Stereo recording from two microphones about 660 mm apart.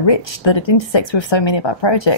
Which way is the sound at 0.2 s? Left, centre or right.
Left.